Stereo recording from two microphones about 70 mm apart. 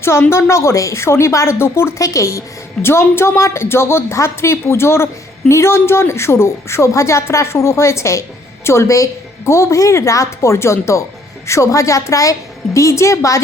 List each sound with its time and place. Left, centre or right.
0.0 s speech: left
2.0 s a woman's voice: left
2.8 s a woman's voice: left